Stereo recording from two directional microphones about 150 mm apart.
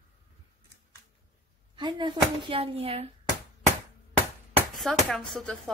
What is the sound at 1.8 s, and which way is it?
Speech, 30° right (ahead or behind).